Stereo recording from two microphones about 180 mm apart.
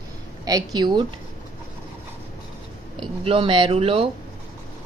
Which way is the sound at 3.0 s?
30° right (ahead or behind).